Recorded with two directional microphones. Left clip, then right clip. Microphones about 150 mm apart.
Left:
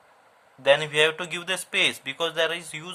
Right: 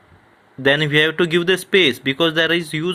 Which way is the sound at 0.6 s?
25° right (ahead or behind).